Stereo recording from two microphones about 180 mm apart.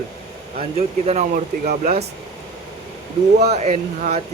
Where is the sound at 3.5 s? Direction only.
40° right (ahead or behind).